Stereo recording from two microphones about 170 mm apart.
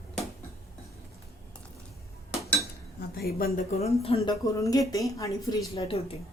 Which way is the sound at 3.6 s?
40° left (ahead or behind).